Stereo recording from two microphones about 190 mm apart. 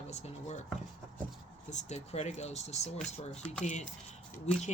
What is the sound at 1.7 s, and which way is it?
Speech, 40° left (ahead or behind).